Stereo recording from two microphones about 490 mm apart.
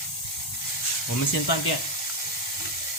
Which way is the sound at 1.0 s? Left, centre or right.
Left.